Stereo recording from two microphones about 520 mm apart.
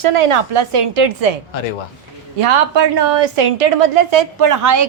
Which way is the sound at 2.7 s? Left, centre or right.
Right.